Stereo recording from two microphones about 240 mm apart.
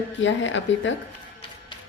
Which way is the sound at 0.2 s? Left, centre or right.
Left.